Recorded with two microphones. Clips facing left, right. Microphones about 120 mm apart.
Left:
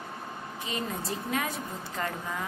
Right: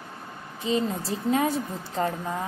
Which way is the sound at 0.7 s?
30° right (ahead or behind).